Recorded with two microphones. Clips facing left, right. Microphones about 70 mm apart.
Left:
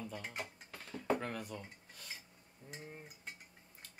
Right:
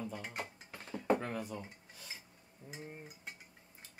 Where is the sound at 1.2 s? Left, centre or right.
Right.